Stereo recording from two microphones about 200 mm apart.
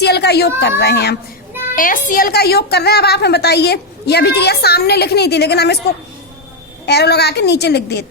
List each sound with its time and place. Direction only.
0.0 s a woman's voice: 55° left (ahead or behind)
1.7 s a woman's voice: 45° left (ahead or behind)
6.8 s a woman's voice: 55° left (ahead or behind)